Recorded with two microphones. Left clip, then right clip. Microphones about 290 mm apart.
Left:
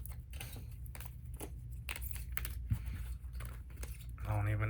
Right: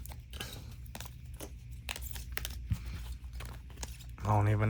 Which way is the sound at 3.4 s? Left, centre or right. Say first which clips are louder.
Right 6 dB; right.